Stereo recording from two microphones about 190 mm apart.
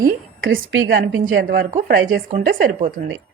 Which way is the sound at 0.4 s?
85° right.